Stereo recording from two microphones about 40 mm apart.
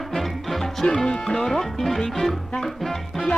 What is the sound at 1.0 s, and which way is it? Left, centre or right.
Speech, centre.